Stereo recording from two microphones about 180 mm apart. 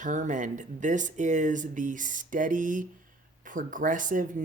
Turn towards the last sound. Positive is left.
turn(degrees=-45)  # may be behind; listen again after turning